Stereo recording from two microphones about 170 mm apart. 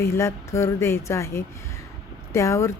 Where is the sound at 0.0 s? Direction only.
15° left (ahead or behind).